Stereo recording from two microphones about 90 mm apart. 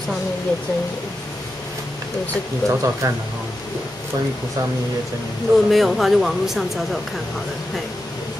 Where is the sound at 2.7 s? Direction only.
35° right (ahead or behind).